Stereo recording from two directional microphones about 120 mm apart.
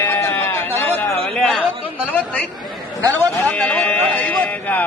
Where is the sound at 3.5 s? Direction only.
10° left (ahead or behind).